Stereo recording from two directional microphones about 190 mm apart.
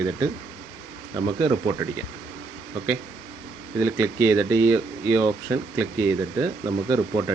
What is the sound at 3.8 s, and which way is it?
Speech, 15° right (ahead or behind).